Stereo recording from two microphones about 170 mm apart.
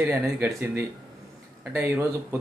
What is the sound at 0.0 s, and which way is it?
A man's voice, 10° right (ahead or behind).